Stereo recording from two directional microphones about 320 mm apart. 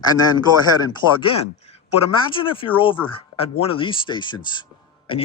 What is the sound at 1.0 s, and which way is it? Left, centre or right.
Speech, left.